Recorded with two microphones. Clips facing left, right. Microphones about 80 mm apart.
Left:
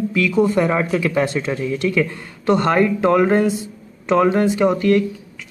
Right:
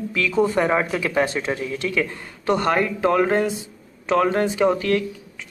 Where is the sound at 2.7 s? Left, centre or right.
Centre.